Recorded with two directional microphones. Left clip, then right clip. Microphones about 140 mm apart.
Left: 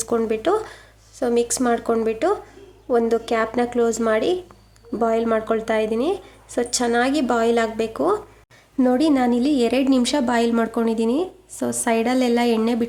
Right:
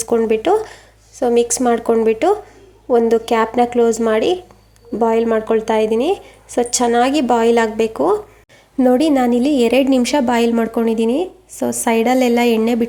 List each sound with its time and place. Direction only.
0.0 s speech: 10° right (ahead or behind)